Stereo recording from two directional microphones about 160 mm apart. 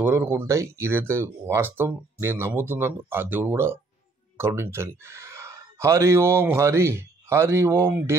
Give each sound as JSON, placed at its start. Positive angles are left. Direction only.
{"t": 0.0, "sound": "speech", "side_deg": -15}